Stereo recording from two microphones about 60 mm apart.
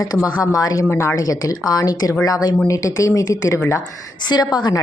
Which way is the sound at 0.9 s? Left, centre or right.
Left.